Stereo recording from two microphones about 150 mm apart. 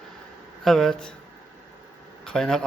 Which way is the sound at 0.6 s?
Centre (ahead or behind).